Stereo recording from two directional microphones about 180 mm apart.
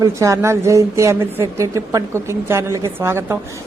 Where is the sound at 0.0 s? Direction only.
15° right (ahead or behind).